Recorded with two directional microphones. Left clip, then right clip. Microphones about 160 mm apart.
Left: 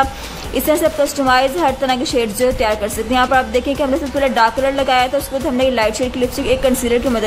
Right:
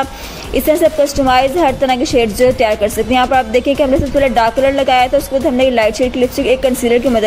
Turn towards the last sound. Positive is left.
turn(degrees=-10)  # may be behind; listen again after turning